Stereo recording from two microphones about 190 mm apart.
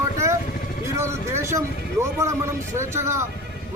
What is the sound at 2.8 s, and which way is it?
Speech, 15° right (ahead or behind).